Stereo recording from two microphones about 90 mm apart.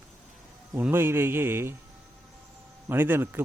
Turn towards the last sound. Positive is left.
turn(degrees=-25)  # may be behind; listen again after turning